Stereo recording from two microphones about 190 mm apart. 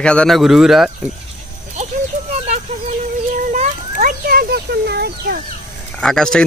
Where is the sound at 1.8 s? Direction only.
35° right (ahead or behind).